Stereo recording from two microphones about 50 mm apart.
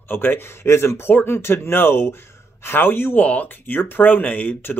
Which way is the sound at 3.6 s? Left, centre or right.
Left.